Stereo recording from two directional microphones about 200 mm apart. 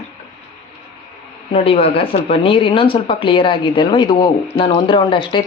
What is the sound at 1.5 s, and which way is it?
Speech, 30° left (ahead or behind).